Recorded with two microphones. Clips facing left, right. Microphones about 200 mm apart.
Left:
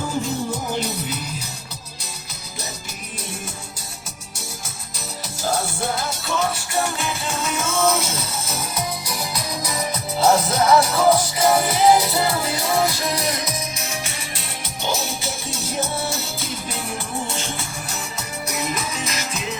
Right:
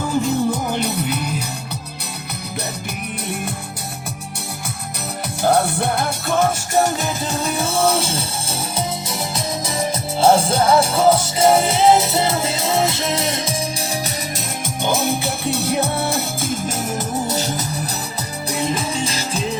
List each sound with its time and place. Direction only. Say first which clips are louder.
0.2 s music: right 8 dB; 60° right (ahead or behind)
5.4 s music: right 7 dB; 60° right (ahead or behind); by 14.4 s 35° right (ahead or behind)
14.8 s music: right 6 dB; 55° right (ahead or behind); by 19.5 s 30° right (ahead or behind)